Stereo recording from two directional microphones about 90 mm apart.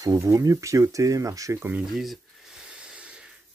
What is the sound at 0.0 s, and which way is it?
Speech, 40° right (ahead or behind).